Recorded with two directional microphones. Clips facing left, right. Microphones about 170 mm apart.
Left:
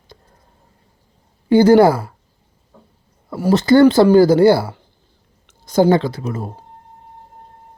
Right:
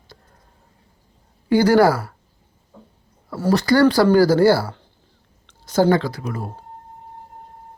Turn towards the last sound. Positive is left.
turn(degrees=25)  # may be behind; listen again after turning